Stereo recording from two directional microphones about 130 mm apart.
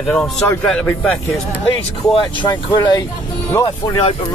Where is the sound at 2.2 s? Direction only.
35° left (ahead or behind).